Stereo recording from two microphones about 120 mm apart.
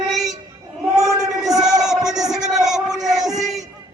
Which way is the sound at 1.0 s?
5° right (ahead or behind).